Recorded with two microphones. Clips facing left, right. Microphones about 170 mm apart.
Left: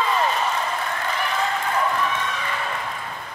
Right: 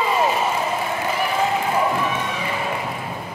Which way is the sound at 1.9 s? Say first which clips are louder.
Right 2 dB; 15° right (ahead or behind).